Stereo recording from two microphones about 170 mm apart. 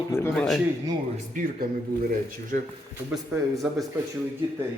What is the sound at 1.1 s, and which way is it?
Speech, 50° right (ahead or behind).